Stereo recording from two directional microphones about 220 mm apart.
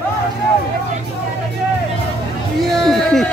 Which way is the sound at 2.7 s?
Centre (ahead or behind).